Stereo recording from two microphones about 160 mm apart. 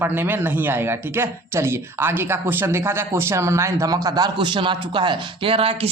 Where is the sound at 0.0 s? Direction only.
10° right (ahead or behind).